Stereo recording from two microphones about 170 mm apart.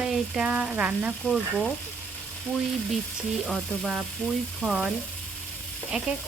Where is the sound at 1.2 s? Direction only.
5° left (ahead or behind).